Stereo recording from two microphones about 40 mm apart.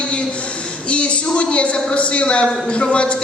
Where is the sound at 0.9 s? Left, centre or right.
Left.